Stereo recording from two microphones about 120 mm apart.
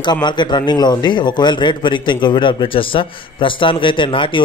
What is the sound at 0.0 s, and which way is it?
A man's voice, 40° left (ahead or behind).